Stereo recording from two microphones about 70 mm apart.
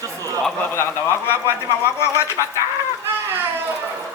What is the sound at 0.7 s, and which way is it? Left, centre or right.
A man's voice, left.